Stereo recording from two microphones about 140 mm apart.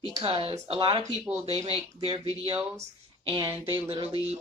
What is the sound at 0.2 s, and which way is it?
Speech, 45° right (ahead or behind).